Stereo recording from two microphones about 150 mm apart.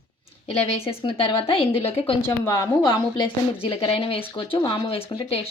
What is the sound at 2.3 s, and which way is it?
A woman's voice, 25° left (ahead or behind).